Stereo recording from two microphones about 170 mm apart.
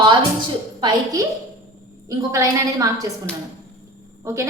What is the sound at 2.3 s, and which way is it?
Speech, 20° right (ahead or behind).